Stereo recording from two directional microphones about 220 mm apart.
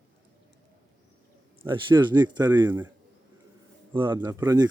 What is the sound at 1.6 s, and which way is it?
A man's voice, 20° right (ahead or behind).